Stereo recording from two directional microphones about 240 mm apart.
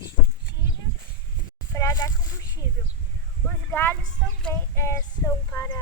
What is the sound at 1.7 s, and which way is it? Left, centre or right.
Speech, centre.